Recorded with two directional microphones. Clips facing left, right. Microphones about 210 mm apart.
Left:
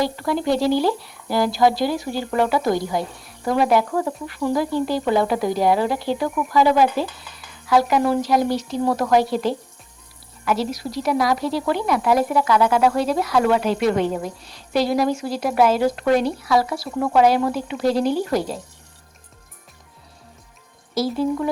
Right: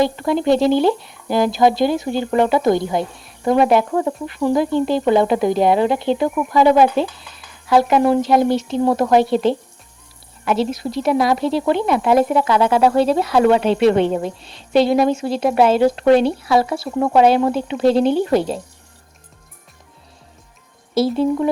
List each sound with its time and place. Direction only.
0.0 s speech: 20° right (ahead or behind)
20.9 s speech: 25° right (ahead or behind)